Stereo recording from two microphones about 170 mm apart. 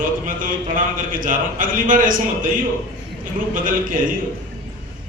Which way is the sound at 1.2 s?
55° right (ahead or behind).